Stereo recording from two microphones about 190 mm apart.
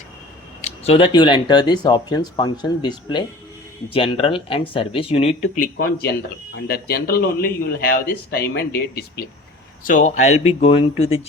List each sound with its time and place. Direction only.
0.6 s speech: 30° left (ahead or behind)
6.6 s speech: 55° left (ahead or behind)
9.8 s speech: 40° left (ahead or behind)